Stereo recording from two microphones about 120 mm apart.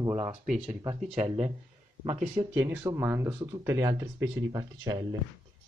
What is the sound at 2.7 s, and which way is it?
Speech, 20° right (ahead or behind).